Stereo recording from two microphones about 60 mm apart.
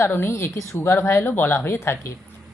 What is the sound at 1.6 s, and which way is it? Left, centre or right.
Speech, left.